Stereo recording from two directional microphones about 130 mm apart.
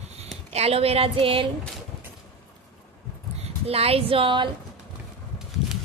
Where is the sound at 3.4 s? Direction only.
50° right (ahead or behind).